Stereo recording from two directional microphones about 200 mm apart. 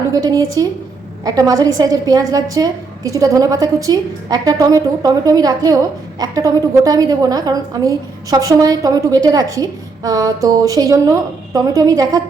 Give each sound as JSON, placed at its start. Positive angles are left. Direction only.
{"t": 0.1, "sound": "a woman's voice", "side_deg": -20}